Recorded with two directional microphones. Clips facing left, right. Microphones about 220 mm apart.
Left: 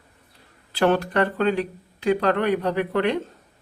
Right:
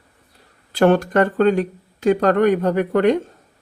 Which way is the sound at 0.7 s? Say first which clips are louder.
Right 5 dB; 50° right (ahead or behind).